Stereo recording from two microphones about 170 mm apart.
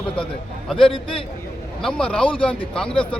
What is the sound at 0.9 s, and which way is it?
Speech, 30° left (ahead or behind).